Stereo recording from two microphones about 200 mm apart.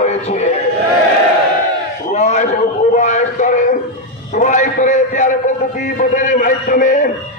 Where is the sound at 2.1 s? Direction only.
35° left (ahead or behind).